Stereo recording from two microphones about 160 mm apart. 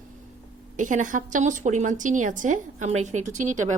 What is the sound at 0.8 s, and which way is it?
A woman's voice, 50° right (ahead or behind).